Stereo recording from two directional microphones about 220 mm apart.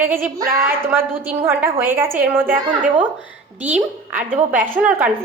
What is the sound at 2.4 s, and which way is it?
Speech, 35° right (ahead or behind).